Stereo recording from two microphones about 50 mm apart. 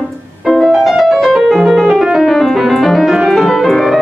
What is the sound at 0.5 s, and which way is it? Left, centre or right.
Music, centre.